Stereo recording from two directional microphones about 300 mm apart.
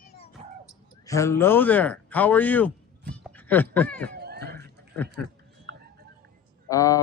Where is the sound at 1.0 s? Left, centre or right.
Centre.